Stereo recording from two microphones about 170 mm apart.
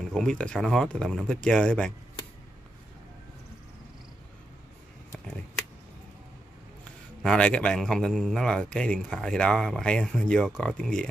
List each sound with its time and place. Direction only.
0.1 s speech: 5° left (ahead or behind)
7.2 s speech: 5° left (ahead or behind)